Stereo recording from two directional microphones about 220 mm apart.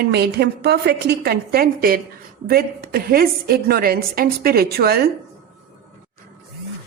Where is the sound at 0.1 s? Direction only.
45° right (ahead or behind).